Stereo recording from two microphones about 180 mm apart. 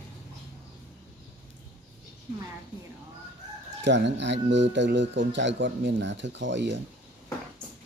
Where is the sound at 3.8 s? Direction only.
80° right.